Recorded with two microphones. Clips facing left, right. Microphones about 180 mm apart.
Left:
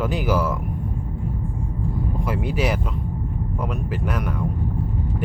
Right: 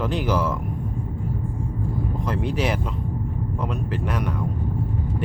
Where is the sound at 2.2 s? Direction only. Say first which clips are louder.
Left 1 dB; 5° left (ahead or behind).